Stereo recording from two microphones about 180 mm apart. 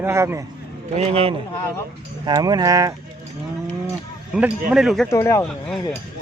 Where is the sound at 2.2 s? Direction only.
20° right (ahead or behind).